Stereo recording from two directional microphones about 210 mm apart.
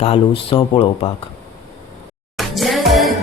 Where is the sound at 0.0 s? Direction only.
30° left (ahead or behind).